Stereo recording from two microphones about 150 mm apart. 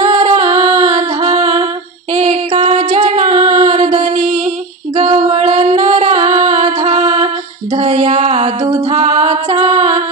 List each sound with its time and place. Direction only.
0.0 s music: 45° right (ahead or behind)
4.9 s female singing: 45° right (ahead or behind)
6.8 s music: 45° right (ahead or behind)